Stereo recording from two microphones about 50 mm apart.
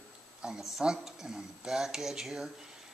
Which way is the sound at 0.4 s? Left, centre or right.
Centre.